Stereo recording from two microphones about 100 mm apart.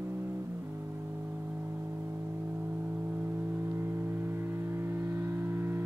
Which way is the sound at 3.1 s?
25° right (ahead or behind).